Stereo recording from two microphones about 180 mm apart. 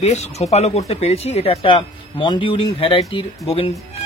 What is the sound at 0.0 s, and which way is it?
Speech, 35° left (ahead or behind).